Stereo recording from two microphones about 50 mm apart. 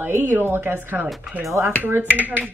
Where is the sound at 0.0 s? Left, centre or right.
Right.